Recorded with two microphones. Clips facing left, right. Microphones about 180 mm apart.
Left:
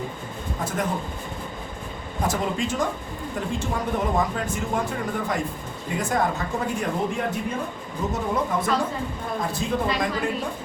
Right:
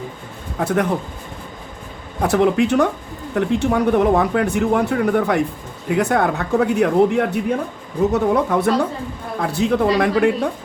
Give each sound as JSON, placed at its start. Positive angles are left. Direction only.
{"t": 0.6, "sound": "speech", "side_deg": -65}
{"t": 2.2, "sound": "speech", "side_deg": -65}